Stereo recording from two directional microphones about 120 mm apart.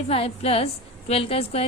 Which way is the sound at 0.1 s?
55° left (ahead or behind).